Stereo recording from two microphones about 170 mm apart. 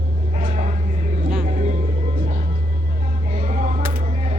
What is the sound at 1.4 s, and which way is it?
Music, 45° right (ahead or behind).